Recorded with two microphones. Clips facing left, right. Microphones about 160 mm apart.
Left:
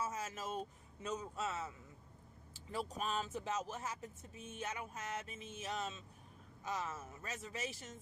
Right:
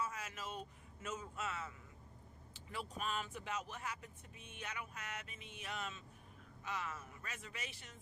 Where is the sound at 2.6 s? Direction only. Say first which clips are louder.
Left 3 dB; 40° left (ahead or behind).